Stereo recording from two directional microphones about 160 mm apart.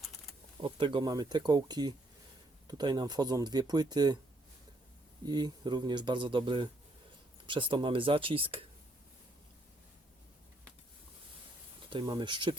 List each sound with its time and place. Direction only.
0.6 s speech: 30° right (ahead or behind)
5.2 s speech: 25° right (ahead or behind)
11.9 s speech: 30° right (ahead or behind)